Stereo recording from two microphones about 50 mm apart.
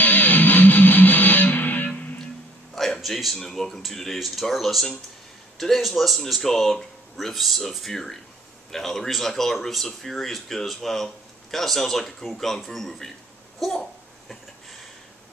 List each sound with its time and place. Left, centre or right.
0.0 s music: left
2.7 s a child's voice: centre